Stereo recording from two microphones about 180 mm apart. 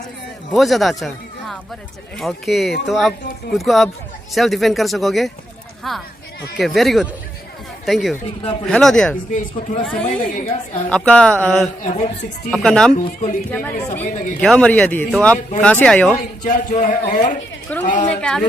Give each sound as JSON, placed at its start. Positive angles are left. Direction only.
{"t": 0.5, "sound": "speech", "side_deg": 0}
{"t": 10.1, "sound": "a woman's voice", "side_deg": 40}
{"t": 10.8, "sound": "speech", "side_deg": 5}
{"t": 11.8, "sound": "a woman's voice", "side_deg": 40}
{"t": 12.5, "sound": "speech", "side_deg": 5}
{"t": 12.9, "sound": "a man's voice", "side_deg": 45}
{"t": 13.5, "sound": "speech", "side_deg": 10}
{"t": 16.4, "sound": "a man's voice", "side_deg": 45}
{"t": 17.7, "sound": "speech", "side_deg": 10}